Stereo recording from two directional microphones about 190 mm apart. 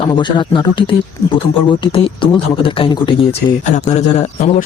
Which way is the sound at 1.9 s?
25° left (ahead or behind).